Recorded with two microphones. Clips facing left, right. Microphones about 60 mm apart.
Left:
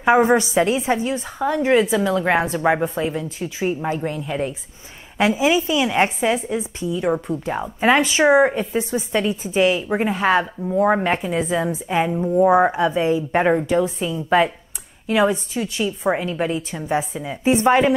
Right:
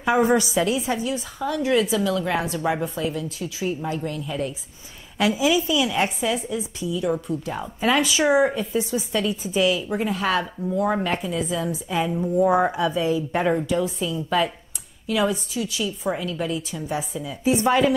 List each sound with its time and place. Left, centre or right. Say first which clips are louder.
0.0 s a woman's voice: left 4 dB; left
11.2 s a woman's voice: left 4 dB; left
12.1 s a woman's voice: left 4 dB; left